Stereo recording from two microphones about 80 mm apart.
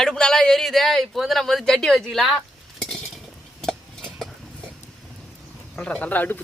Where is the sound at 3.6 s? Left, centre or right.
Centre.